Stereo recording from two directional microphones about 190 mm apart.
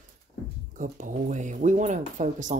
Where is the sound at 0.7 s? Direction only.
45° right (ahead or behind).